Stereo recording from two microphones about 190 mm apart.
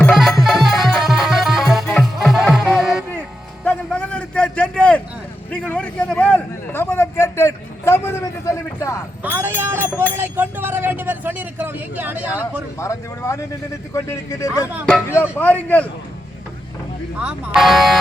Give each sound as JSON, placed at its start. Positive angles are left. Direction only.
{"t": 0.1, "sound": "music", "side_deg": 0}
{"t": 5.5, "sound": "a sound", "side_deg": 5}
{"t": 9.2, "sound": "speech", "side_deg": -10}
{"t": 12.8, "sound": "speech", "side_deg": 15}
{"t": 17.2, "sound": "speech", "side_deg": -5}